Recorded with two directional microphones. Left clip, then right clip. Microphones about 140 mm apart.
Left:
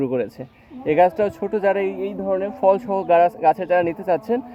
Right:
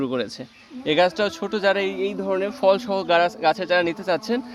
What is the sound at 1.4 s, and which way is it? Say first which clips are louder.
Speech: even; 5° left (ahead or behind).